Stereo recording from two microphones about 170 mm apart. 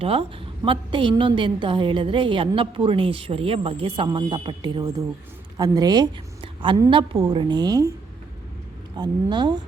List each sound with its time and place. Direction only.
0.0 s a woman's voice: 35° right (ahead or behind)
9.0 s speech: 25° right (ahead or behind)